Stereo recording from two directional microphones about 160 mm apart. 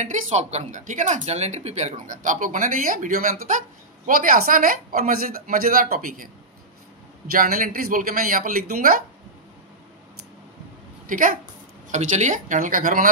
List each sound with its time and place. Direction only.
0.0 s speech: 50° right (ahead or behind)
7.2 s speech: 65° right (ahead or behind)
11.1 s speech: 60° right (ahead or behind)
11.9 s speech: 45° right (ahead or behind)